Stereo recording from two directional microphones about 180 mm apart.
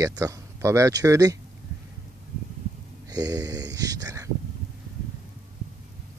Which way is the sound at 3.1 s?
20° right (ahead or behind).